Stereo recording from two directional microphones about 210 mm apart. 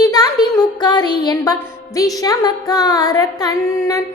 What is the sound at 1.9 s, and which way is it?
Child singing, 15° left (ahead or behind).